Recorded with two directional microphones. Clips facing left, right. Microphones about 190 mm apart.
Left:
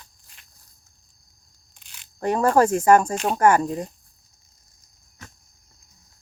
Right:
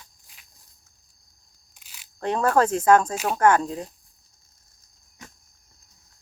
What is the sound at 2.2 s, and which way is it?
Speech, 10° left (ahead or behind).